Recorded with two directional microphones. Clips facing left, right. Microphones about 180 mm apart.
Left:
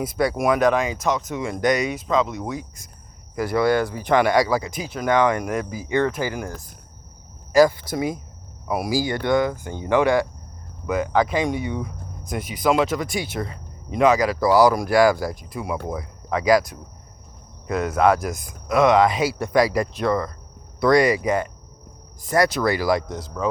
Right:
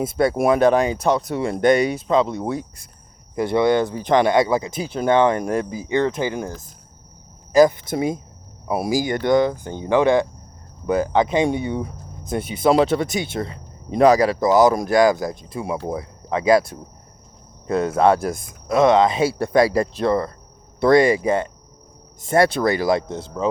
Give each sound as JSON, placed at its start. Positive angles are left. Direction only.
{"t": 0.0, "sound": "speech", "side_deg": -25}
{"t": 7.5, "sound": "speech", "side_deg": -20}
{"t": 10.8, "sound": "speech", "side_deg": -30}